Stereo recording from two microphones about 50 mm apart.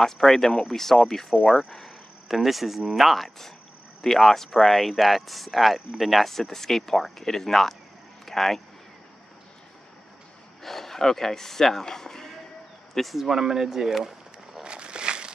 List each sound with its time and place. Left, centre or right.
0.0 s speech: centre
10.6 s speech: centre
12.9 s speech: centre
14.6 s a sound: centre